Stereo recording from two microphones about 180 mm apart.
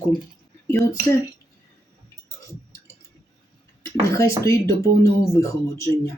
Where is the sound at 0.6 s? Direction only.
15° left (ahead or behind).